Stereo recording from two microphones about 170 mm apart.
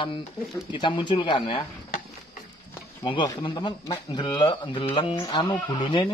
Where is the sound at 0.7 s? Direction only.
30° left (ahead or behind).